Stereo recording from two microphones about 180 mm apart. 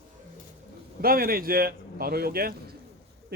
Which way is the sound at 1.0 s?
55° right (ahead or behind).